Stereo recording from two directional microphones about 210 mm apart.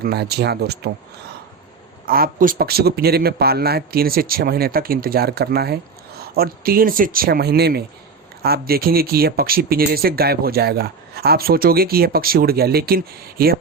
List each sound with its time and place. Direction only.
0.0 s a man's voice: 50° right (ahead or behind)
2.0 s a man's voice: 45° right (ahead or behind)